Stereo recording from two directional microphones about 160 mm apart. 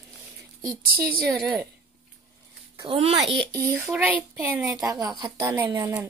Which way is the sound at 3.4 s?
10° left (ahead or behind).